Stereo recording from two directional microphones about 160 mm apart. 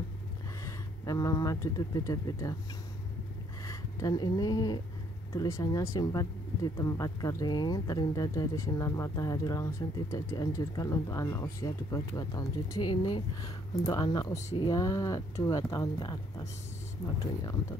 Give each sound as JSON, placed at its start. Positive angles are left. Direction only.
{"t": 0.7, "sound": "speech", "side_deg": 20}
{"t": 3.6, "sound": "speech", "side_deg": 25}